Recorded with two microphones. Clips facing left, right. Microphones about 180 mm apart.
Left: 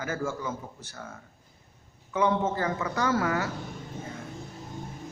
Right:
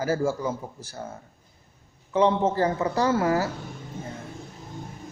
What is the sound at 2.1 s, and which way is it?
A man's voice, 30° right (ahead or behind).